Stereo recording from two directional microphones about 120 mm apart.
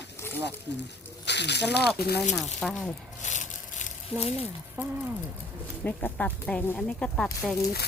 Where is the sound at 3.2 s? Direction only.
90° left.